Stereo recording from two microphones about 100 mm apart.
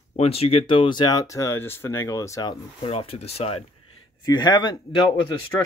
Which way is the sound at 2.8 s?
75° left (ahead or behind).